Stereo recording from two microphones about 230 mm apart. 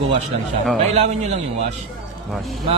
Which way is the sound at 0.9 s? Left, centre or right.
Right.